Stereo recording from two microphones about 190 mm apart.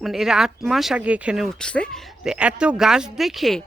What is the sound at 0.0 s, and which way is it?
Speech, centre (ahead or behind).